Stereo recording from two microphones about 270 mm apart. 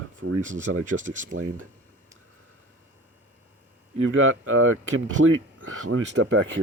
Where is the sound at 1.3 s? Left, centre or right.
Right.